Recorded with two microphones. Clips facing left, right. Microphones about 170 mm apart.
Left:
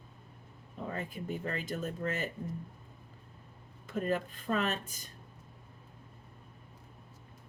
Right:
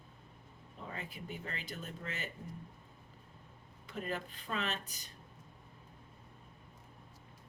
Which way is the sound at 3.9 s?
45° left (ahead or behind).